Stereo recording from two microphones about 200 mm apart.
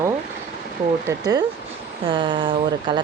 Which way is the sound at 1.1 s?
20° right (ahead or behind).